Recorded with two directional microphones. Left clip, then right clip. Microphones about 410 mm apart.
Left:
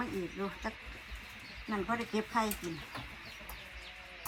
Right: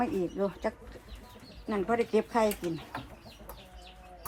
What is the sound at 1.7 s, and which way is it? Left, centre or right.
Speech, centre.